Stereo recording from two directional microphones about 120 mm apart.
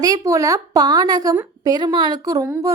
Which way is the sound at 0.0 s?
30° right (ahead or behind).